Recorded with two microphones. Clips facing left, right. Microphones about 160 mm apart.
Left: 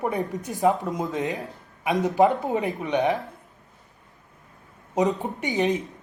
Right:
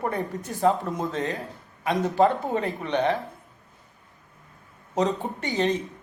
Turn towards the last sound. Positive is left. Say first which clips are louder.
# left 1 dB
turn(degrees=15)  # may be behind; listen again after turning